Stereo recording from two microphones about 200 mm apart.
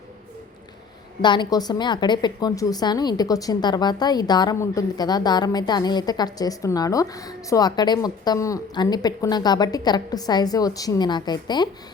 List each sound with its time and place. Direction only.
1.2 s a woman's voice: 20° left (ahead or behind)